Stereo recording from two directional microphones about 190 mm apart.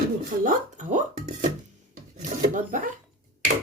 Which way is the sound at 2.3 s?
40° right (ahead or behind).